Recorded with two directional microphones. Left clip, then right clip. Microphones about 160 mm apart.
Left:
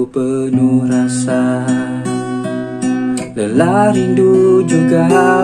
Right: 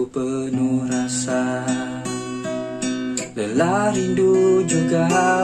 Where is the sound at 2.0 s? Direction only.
45° left (ahead or behind).